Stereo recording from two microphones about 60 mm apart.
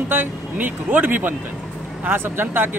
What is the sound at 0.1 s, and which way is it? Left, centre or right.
Speech, right.